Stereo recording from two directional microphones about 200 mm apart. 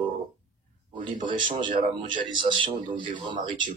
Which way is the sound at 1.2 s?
25° right (ahead or behind).